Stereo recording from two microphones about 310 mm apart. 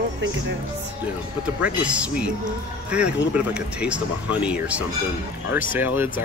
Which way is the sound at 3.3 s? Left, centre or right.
Centre.